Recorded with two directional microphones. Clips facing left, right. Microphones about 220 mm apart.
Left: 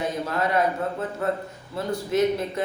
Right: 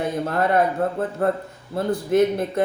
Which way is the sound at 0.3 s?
55° right (ahead or behind).